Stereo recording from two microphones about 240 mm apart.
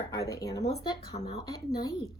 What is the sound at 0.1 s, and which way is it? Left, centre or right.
A woman's voice, centre.